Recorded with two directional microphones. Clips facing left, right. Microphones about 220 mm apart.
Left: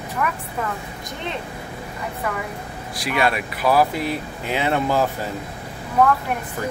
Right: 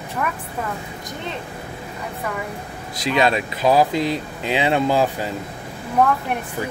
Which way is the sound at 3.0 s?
20° right (ahead or behind).